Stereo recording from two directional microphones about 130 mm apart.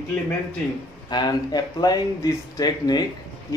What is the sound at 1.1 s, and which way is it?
A man's voice, 35° left (ahead or behind).